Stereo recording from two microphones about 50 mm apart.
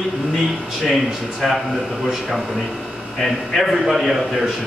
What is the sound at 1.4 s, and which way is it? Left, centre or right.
Speech, centre.